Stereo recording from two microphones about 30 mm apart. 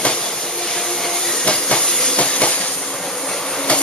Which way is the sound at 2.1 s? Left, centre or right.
Left.